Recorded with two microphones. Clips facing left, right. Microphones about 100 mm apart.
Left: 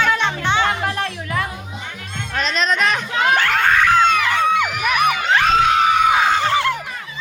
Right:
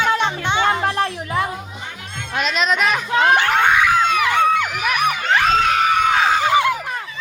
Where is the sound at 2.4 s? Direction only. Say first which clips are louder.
Even; 5° right (ahead or behind).